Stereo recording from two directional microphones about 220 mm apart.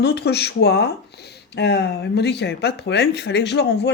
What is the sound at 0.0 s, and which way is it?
Speech, 50° left (ahead or behind).